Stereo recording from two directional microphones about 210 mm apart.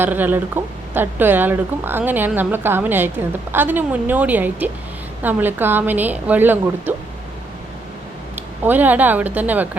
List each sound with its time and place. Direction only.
0.0 s speech: 10° right (ahead or behind)
8.4 s speech: 10° right (ahead or behind)